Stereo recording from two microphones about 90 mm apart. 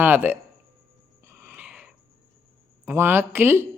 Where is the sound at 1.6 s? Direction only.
15° right (ahead or behind).